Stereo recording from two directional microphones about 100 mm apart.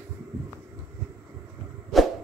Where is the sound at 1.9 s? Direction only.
Centre (ahead or behind).